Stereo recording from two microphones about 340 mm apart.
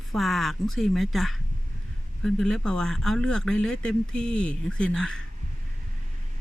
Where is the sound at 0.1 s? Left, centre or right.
Centre.